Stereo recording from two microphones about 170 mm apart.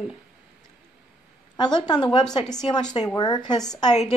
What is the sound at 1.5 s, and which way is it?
A woman's voice, 25° left (ahead or behind).